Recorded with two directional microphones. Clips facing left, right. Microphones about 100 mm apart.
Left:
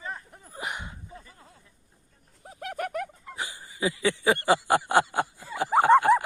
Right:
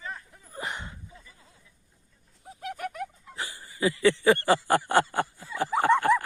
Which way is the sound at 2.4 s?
55° left (ahead or behind).